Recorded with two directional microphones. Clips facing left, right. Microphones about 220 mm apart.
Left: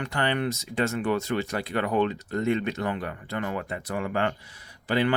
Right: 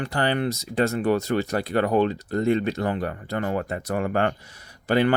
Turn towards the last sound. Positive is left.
turn(degrees=-45)  # may be behind; listen again after turning